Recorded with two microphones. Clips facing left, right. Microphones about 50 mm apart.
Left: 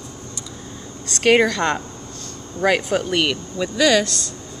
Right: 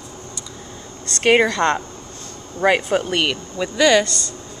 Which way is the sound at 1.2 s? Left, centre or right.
Centre.